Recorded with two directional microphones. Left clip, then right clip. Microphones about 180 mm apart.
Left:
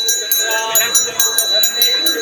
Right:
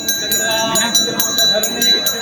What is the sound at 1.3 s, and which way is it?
Clip-clop, 20° left (ahead or behind).